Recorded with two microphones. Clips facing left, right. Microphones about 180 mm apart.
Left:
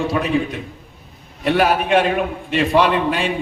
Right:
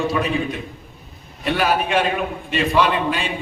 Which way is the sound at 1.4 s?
60° left (ahead or behind).